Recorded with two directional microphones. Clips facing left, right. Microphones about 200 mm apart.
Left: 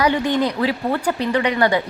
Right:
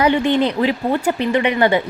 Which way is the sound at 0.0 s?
25° right (ahead or behind).